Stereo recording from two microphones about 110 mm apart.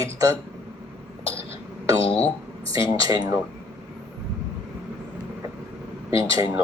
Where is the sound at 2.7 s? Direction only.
35° right (ahead or behind).